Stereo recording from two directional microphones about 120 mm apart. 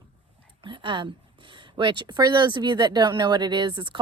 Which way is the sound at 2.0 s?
40° right (ahead or behind).